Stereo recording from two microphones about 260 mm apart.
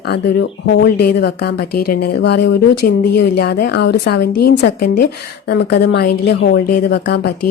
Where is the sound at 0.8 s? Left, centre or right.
Left.